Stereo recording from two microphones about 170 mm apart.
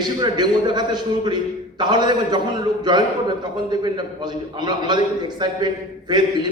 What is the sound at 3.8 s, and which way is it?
A man's voice, 25° right (ahead or behind).